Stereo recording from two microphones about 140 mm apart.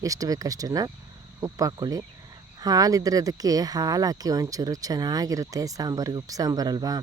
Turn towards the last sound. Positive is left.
turn(degrees=-30)  # may be behind; listen again after turning